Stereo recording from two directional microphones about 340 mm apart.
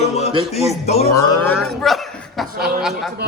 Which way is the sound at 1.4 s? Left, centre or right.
Centre.